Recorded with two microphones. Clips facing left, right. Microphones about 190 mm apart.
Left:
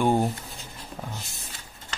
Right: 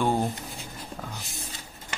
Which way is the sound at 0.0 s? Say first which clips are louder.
Left 3 dB; 15° left (ahead or behind).